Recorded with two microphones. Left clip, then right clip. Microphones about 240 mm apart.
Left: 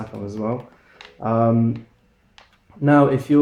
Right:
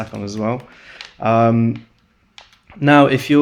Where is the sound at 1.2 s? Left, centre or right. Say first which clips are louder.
Right 5 dB; right.